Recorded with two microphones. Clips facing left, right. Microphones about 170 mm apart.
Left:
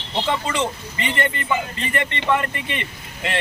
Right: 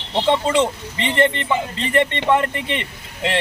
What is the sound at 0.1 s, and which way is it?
Speech, 25° right (ahead or behind).